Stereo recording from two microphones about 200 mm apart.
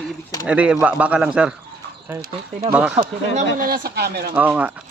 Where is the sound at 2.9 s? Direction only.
35° right (ahead or behind); by 4.3 s 55° right (ahead or behind).